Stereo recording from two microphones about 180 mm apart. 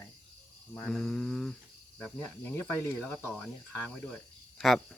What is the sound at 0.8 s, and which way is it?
Cricket, 5° left (ahead or behind).